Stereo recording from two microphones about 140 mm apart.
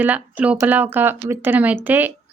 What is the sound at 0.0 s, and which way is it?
Speech, 10° right (ahead or behind).